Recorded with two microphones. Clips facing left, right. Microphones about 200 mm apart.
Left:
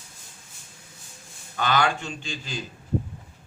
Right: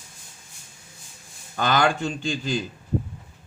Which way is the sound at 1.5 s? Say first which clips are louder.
Right 2 dB; 45° right (ahead or behind).